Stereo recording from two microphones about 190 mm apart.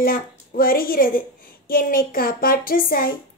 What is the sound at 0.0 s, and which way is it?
A woman's voice, 50° left (ahead or behind).